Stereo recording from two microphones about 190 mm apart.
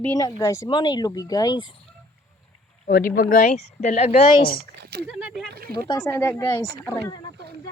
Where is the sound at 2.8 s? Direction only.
50° left (ahead or behind); by 4.4 s 30° left (ahead or behind).